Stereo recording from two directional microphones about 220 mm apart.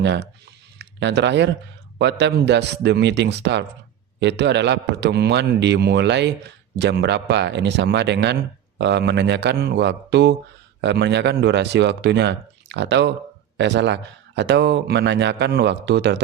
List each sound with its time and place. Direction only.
0.0 s speech: 50° right (ahead or behind)